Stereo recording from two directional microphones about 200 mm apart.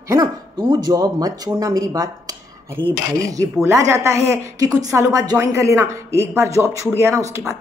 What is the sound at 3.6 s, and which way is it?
Speech, 15° right (ahead or behind).